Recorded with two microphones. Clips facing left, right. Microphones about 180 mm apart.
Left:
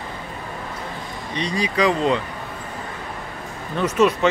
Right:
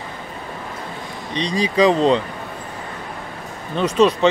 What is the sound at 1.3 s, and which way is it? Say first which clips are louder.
Speech: right 3 dB; 25° right (ahead or behind).